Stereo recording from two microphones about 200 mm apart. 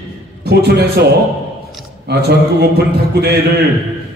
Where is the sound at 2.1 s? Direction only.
55° right (ahead or behind).